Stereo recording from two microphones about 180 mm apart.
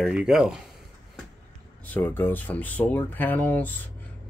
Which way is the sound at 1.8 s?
10° left (ahead or behind).